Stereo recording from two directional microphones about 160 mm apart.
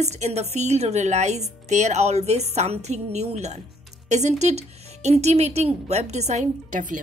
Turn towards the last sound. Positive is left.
turn(degrees=-55)  # may be behind; listen again after turning